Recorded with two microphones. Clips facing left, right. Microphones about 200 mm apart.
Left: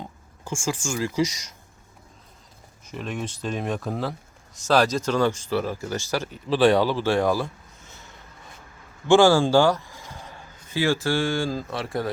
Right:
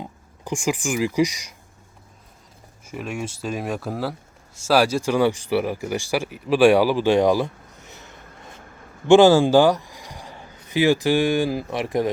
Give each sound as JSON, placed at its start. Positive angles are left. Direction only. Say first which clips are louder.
{"t": 0.0, "sound": "speech", "louder": "right 3 dB", "side_deg": -15}
{"t": 2.8, "sound": "speech", "louder": "right 2 dB", "side_deg": -10}